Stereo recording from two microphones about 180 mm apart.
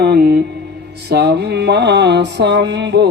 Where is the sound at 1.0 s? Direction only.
65° right (ahead or behind).